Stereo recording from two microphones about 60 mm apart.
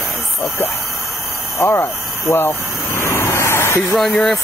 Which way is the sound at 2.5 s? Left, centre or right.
Left.